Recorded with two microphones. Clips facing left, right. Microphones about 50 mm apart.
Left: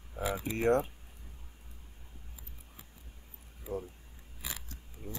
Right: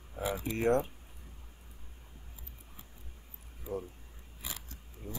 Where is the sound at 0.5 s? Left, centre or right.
Centre.